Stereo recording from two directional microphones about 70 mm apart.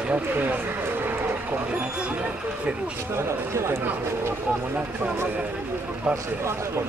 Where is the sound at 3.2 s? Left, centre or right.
Right.